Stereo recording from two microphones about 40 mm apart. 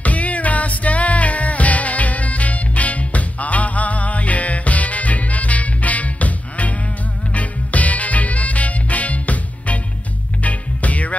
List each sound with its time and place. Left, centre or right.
0.0 s music: left